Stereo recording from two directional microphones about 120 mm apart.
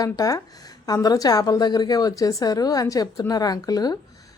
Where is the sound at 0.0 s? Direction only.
30° left (ahead or behind).